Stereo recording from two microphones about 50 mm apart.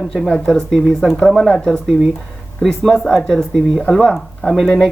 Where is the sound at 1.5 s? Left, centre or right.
Centre.